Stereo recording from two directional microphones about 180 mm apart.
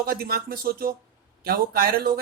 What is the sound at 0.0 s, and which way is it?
Speech, 55° right (ahead or behind).